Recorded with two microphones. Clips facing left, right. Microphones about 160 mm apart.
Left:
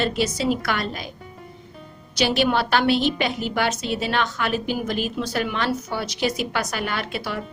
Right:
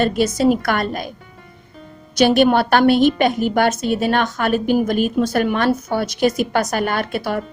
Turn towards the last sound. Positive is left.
turn(degrees=-50)  # may be behind; listen again after turning